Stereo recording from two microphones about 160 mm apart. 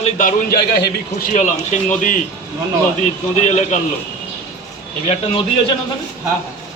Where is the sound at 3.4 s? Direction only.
45° left (ahead or behind).